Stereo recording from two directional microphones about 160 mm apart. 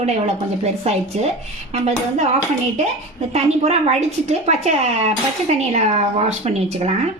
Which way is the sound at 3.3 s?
45° right (ahead or behind).